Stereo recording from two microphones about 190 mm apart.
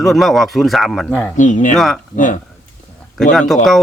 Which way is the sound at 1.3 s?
40° left (ahead or behind).